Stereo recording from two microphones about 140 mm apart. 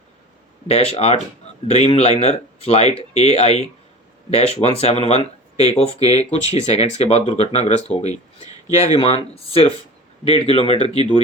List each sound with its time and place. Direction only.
0.7 s speech: 45° left (ahead or behind)